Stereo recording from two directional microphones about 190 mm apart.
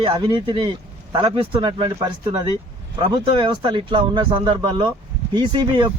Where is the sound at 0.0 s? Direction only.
25° right (ahead or behind).